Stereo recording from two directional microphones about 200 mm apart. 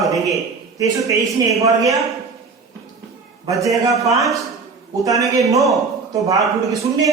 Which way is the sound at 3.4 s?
15° right (ahead or behind).